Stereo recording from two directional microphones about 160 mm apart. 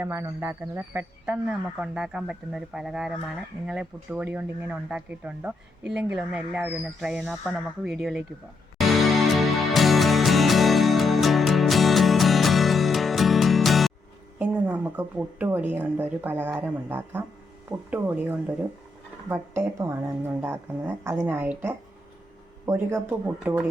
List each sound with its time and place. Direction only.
0.0 s a woman's voice: 15° right (ahead or behind)
8.8 s music: centre (ahead or behind)
14.3 s a woman's voice: 10° right (ahead or behind)